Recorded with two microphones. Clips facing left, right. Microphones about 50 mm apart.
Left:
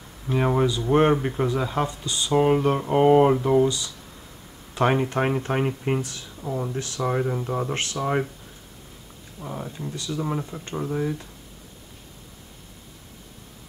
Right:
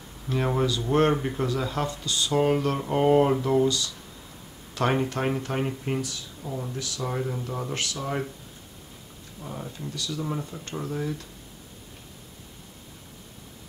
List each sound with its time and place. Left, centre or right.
0.3 s speech: centre
9.4 s speech: centre